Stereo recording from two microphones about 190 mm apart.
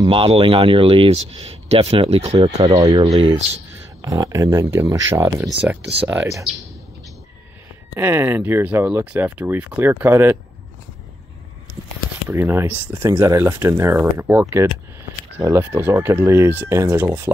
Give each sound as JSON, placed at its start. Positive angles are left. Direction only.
{"t": 0.0, "sound": "speech", "side_deg": -30}
{"t": 2.4, "sound": "speech", "side_deg": -20}
{"t": 7.9, "sound": "speech", "side_deg": -15}
{"t": 12.3, "sound": "speech", "side_deg": -10}